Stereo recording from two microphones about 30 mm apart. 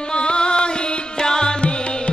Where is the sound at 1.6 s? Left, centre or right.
Left.